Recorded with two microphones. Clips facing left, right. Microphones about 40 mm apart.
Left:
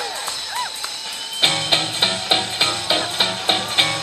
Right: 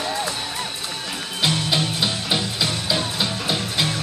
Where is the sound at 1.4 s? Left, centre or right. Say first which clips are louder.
Left 2 dB; left.